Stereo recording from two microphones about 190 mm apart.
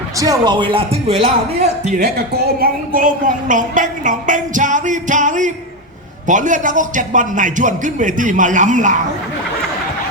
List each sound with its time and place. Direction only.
0.2 s speech: 20° right (ahead or behind)
2.0 s a man's voice: 55° right (ahead or behind)
3.5 s music: 45° right (ahead or behind)
6.2 s a man's voice: 40° right (ahead or behind)